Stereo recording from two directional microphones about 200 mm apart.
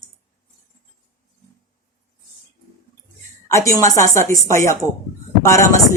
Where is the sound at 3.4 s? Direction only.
15° left (ahead or behind).